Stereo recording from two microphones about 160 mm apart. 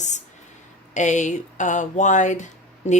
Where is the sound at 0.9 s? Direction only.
50° left (ahead or behind).